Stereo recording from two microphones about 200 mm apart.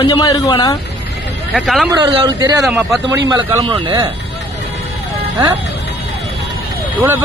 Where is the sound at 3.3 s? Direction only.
20° right (ahead or behind).